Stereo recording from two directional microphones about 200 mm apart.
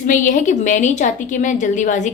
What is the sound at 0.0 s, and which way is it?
A woman's voice, 40° left (ahead or behind).